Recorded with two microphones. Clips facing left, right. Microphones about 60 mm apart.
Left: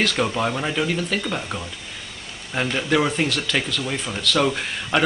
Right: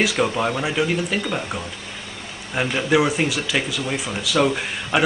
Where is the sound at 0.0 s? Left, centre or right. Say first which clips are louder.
Right 2 dB; centre.